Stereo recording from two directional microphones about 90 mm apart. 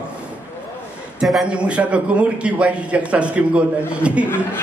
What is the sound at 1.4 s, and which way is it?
A man's voice, 10° right (ahead or behind).